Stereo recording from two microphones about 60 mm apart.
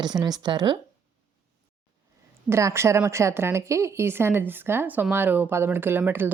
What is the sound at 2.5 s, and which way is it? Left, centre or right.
A woman's voice, right.